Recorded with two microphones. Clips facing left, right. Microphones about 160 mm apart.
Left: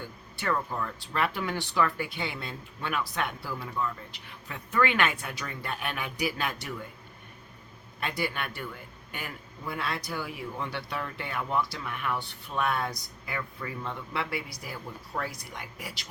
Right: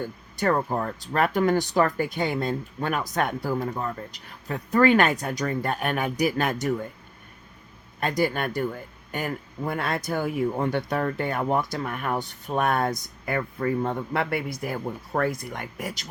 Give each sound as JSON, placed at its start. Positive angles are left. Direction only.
{"t": 0.0, "sound": "a man's voice", "side_deg": -45}
{"t": 8.0, "sound": "a man's voice", "side_deg": -45}